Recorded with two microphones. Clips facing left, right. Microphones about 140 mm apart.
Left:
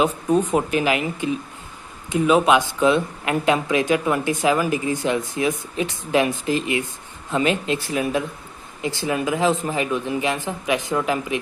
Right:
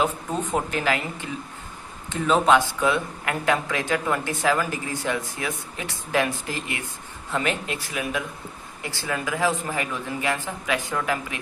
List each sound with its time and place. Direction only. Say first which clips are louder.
0.0 s speech: left 6 dB; 15° left (ahead or behind)
8.8 s speech: left 6 dB; 20° left (ahead or behind)